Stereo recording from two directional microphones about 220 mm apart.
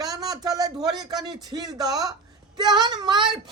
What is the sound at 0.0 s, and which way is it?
A woman's voice, 15° right (ahead or behind).